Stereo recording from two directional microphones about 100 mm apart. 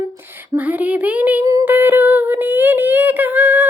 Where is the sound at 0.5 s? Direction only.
15° right (ahead or behind).